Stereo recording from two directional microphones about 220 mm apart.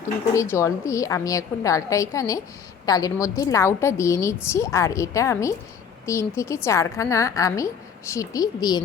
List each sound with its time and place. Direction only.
0.3 s a woman's voice: 15° left (ahead or behind)